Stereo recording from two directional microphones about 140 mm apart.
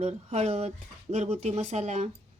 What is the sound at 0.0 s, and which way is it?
Speech, 50° right (ahead or behind).